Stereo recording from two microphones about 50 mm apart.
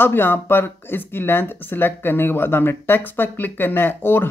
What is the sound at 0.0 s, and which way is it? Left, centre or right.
Speech, left.